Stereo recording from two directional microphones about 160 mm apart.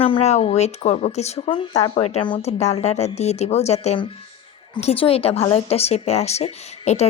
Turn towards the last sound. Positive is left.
turn(degrees=40)  # may be behind; listen again after turning